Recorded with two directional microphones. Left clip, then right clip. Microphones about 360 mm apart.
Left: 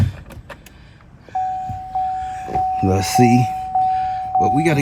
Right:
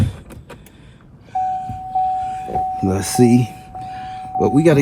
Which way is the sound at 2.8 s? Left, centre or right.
Centre.